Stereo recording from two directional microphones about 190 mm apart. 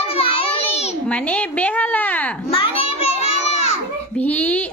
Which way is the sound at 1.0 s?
5° left (ahead or behind).